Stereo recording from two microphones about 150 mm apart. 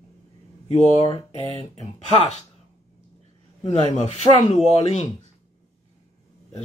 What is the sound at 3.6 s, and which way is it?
Speech, 45° left (ahead or behind).